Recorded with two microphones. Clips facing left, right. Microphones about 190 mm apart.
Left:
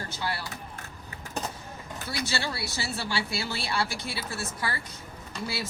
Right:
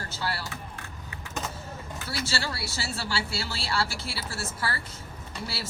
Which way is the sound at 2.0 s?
20° left (ahead or behind).